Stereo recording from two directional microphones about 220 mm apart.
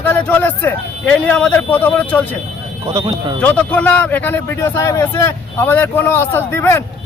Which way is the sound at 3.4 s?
5° left (ahead or behind).